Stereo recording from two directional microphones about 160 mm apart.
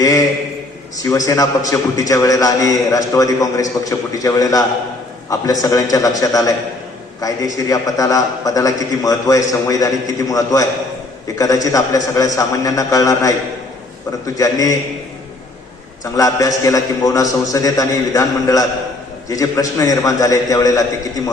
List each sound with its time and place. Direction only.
0.0 s a sound: 20° left (ahead or behind)
1.1 s a man's voice: 20° left (ahead or behind)
14.3 s a man's voice: 20° left (ahead or behind)
16.1 s a man's voice: 20° left (ahead or behind)